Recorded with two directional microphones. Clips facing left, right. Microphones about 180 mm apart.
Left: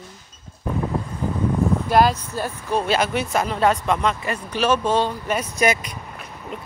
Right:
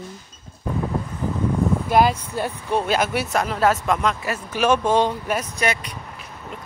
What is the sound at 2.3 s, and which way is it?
Speech, 20° right (ahead or behind).